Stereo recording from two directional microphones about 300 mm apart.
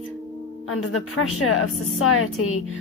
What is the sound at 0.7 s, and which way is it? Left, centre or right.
Speech, left.